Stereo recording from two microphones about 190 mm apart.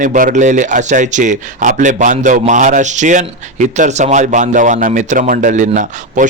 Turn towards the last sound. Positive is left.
turn(degrees=-40)  # may be behind; listen again after turning